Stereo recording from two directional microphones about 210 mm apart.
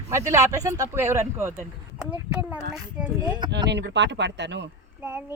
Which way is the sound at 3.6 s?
55° right (ahead or behind).